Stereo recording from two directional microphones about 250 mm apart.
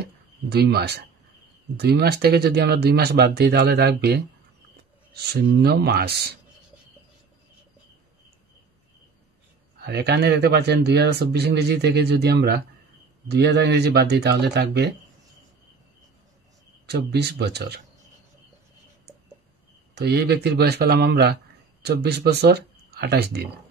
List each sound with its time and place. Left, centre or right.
0.0 s speech: right
9.8 s speech: right
16.8 s speech: right
20.0 s speech: right